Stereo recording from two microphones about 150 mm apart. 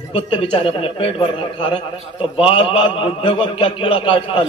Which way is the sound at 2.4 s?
40° left (ahead or behind).